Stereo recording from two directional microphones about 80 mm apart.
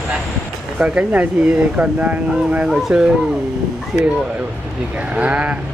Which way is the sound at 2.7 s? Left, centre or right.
Centre.